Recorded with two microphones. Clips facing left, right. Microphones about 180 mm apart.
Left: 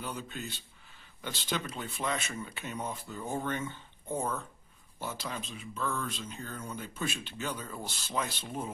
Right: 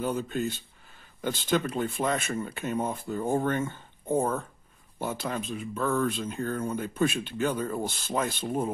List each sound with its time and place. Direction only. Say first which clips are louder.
0.0 s speech: right 10 dB; 50° right (ahead or behind)